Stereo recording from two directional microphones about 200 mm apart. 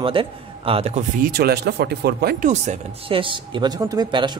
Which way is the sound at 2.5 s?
30° right (ahead or behind).